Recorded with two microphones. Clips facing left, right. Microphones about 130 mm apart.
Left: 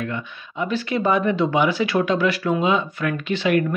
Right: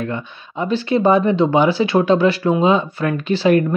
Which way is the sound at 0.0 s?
35° right (ahead or behind).